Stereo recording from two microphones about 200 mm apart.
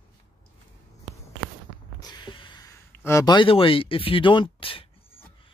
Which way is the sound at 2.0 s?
20° left (ahead or behind).